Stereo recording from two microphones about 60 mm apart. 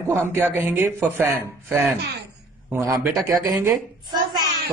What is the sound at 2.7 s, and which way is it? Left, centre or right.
Speech, right.